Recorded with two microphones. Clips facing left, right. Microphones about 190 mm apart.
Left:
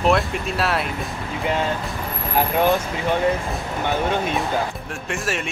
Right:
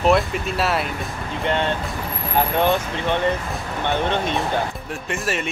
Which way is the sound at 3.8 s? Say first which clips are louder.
Even; 5° left (ahead or behind).